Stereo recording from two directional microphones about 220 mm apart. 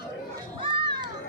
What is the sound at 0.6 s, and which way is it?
Children playing, 20° right (ahead or behind).